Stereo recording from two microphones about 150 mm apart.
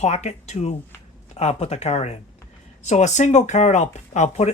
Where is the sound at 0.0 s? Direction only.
50° left (ahead or behind).